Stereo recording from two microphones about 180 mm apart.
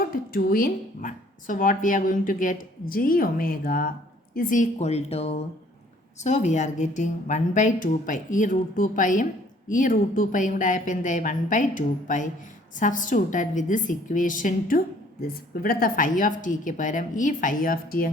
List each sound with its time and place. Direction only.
0.3 s a woman's voice: 55° left (ahead or behind)